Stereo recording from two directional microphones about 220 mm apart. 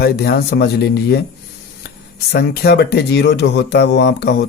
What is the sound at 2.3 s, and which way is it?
Speech, 45° left (ahead or behind).